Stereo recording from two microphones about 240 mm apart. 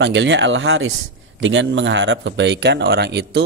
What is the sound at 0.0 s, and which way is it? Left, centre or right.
Speech, right.